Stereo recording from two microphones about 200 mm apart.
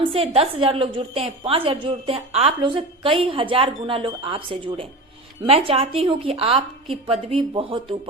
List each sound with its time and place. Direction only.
0.0 s a woman's voice: 30° right (ahead or behind)